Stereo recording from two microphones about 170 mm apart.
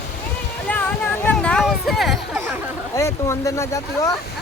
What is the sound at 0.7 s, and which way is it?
Speech, 10° left (ahead or behind).